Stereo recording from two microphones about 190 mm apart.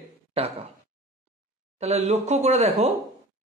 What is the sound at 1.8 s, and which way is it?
A man's voice, 35° right (ahead or behind).